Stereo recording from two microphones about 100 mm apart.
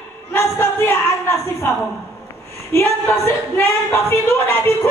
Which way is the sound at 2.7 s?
25° left (ahead or behind).